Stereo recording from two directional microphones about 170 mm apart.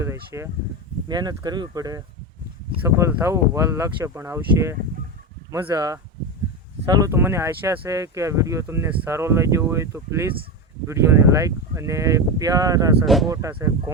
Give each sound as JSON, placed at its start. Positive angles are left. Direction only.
{"t": 0.3, "sound": "speech", "side_deg": -15}
{"t": 13.1, "sound": "speech", "side_deg": 0}
{"t": 13.3, "sound": "speech", "side_deg": -15}